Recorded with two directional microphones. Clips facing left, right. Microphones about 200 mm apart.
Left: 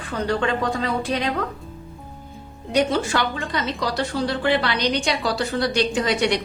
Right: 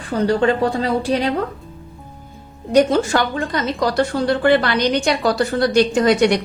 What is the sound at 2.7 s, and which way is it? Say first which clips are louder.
A woman's voice: right 6 dB; 45° right (ahead or behind).